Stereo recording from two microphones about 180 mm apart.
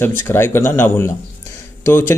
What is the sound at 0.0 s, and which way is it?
Speech, 15° left (ahead or behind).